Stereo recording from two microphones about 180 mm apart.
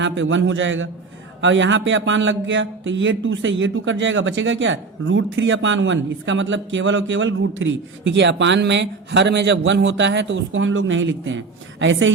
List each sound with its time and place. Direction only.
0.0 s speech: 90° right